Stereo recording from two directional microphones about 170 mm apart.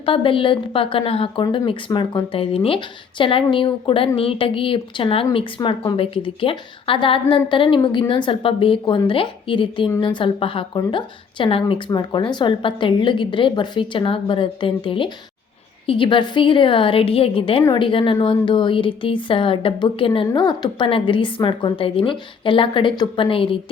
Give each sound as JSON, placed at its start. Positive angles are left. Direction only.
{"t": 0.0, "sound": "a woman's voice", "side_deg": 30}